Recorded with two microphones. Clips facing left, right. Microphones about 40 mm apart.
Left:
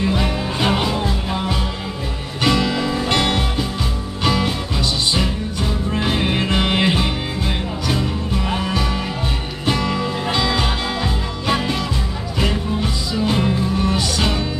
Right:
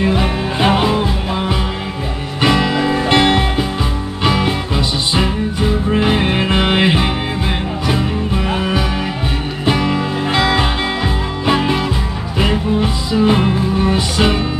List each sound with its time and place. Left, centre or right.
0.0 s music: centre